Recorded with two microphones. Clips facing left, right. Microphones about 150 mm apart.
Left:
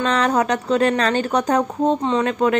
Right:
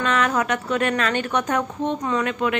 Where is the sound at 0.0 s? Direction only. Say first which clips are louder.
Left 3 dB; 35° left (ahead or behind).